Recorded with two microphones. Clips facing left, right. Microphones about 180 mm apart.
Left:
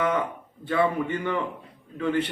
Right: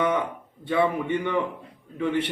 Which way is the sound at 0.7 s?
15° right (ahead or behind).